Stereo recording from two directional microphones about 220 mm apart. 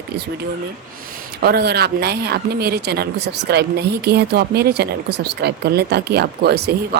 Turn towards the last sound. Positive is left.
turn(degrees=-45)  # may be behind; listen again after turning